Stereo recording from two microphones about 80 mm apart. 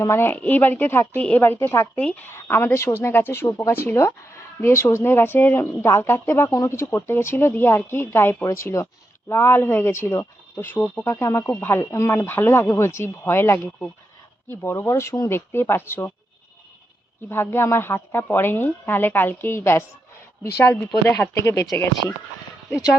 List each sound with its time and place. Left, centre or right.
0.0 s speech: left
2.0 s speech: centre
2.2 s speech: left
9.3 s speech: left
10.8 s speech: centre
11.0 s speech: left
17.2 s speech: left